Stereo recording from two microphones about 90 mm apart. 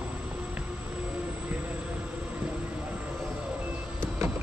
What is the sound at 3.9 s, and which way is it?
Vehicle, 30° right (ahead or behind).